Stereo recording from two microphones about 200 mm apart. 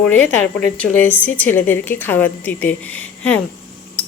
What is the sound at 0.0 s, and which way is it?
A woman's voice, 10° left (ahead or behind).